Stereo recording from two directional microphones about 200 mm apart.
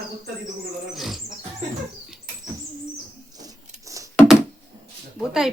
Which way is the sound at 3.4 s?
15° right (ahead or behind).